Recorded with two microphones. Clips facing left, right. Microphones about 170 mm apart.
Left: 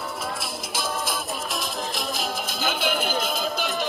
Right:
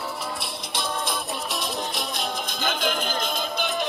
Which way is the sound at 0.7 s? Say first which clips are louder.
Even; centre (ahead or behind).